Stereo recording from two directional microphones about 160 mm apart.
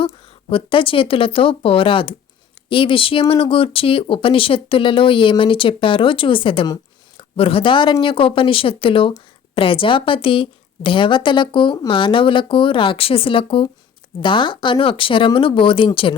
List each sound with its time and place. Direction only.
0.0 s speech: 35° left (ahead or behind)